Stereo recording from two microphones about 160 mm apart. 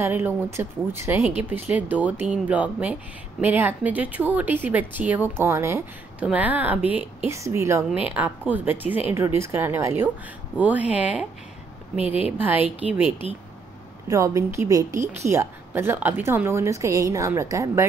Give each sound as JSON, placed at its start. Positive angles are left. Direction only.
{"t": 0.0, "sound": "a woman's voice", "side_deg": -15}
{"t": 14.0, "sound": "speech", "side_deg": -20}